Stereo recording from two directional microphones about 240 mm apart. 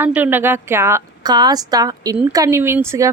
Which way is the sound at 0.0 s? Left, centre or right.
Centre.